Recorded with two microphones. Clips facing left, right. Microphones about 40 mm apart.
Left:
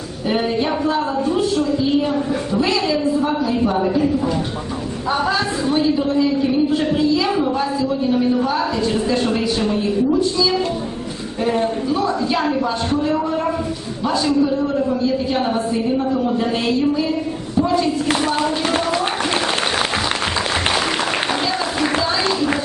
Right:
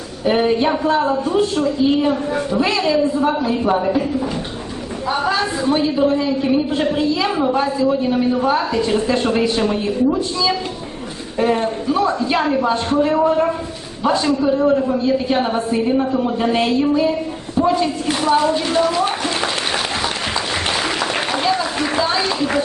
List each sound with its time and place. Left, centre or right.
0.3 s a woman's voice: centre
5.1 s a woman's voice: centre
14.0 s a woman's voice: right
21.8 s a sound: centre